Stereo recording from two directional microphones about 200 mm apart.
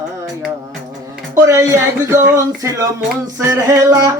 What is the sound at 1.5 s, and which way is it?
Music, 15° right (ahead or behind).